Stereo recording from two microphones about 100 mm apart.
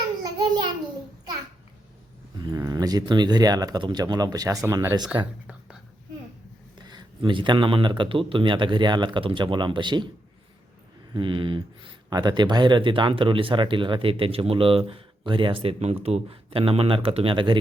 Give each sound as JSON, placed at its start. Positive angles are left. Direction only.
{"t": 0.2, "sound": "a sound", "side_deg": -45}
{"t": 2.6, "sound": "speech", "side_deg": -40}
{"t": 5.1, "sound": "speech", "side_deg": -10}
{"t": 6.9, "sound": "a man's voice", "side_deg": -55}
{"t": 11.1, "sound": "speech", "side_deg": -55}